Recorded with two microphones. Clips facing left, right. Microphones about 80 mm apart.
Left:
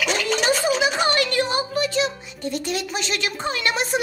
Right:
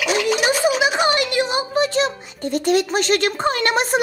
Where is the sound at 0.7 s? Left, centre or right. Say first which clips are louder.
Right 2 dB; centre.